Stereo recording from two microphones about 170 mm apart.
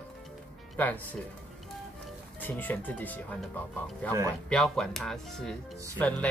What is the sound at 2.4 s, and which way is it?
Speech, 10° left (ahead or behind).